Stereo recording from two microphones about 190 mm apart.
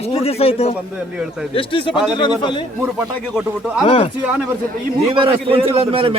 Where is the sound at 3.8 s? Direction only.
30° left (ahead or behind).